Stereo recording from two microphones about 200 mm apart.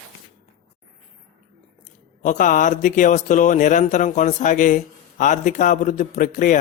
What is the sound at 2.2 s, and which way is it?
Speech, 40° left (ahead or behind).